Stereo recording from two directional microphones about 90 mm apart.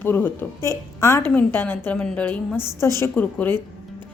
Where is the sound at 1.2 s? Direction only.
20° left (ahead or behind).